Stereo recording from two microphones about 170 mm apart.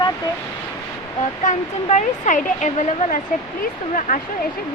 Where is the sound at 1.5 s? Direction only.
45° left (ahead or behind).